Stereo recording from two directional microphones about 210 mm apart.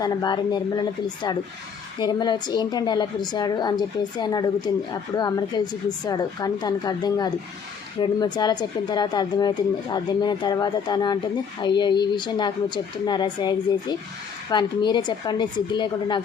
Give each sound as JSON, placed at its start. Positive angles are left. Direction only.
{"t": 0.0, "sound": "a woman's voice", "side_deg": 20}